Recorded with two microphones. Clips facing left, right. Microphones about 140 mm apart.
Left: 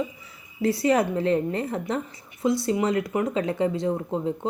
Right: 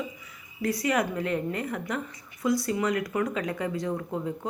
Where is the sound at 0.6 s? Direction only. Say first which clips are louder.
Left 5 dB; 30° left (ahead or behind).